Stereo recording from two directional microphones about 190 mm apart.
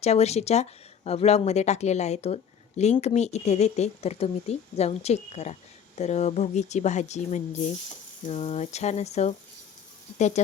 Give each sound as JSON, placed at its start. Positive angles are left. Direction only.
{"t": 0.0, "sound": "speech", "side_deg": 35}